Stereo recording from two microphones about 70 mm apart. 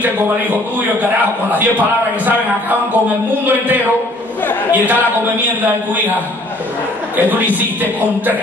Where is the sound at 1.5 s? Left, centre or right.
Right.